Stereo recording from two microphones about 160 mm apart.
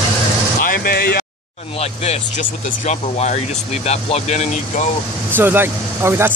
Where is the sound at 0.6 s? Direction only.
65° left (ahead or behind).